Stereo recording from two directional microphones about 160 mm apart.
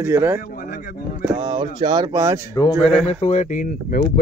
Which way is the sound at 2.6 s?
30° left (ahead or behind).